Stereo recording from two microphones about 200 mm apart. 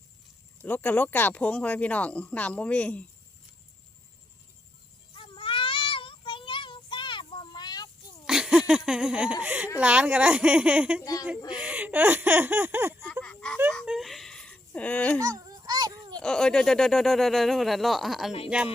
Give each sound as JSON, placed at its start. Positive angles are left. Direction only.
{"t": 0.6, "sound": "speech", "side_deg": 10}
{"t": 5.1, "sound": "child singing", "side_deg": 25}
{"t": 8.2, "sound": "speech", "side_deg": -5}
{"t": 11.0, "sound": "speech", "side_deg": 15}
{"t": 11.5, "sound": "a sound", "side_deg": -5}
{"t": 13.2, "sound": "a sound", "side_deg": 5}
{"t": 15.2, "sound": "honk", "side_deg": -20}
{"t": 16.2, "sound": "speech", "side_deg": 5}